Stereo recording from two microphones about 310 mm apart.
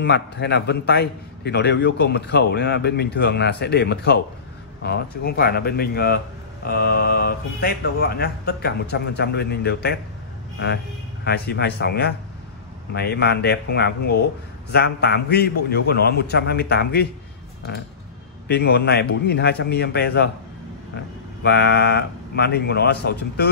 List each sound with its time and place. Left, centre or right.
0.0 s speech: left
11.2 s speech: left
18.5 s speech: left
21.4 s speech: left